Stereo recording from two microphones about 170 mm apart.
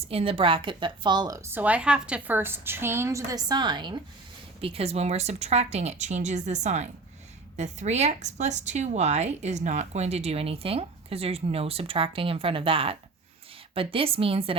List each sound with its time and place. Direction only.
0.1 s a woman's voice: 35° right (ahead or behind)